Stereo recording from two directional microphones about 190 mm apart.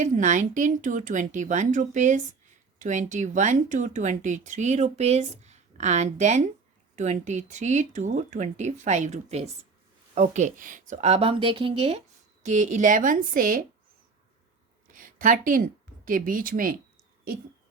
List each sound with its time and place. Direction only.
0.0 s a woman's voice: 40° right (ahead or behind)
14.8 s speech: 45° right (ahead or behind)